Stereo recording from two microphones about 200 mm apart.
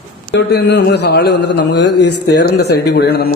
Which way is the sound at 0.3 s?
55° left (ahead or behind).